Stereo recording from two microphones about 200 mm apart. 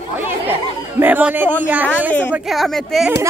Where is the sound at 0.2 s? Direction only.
10° right (ahead or behind).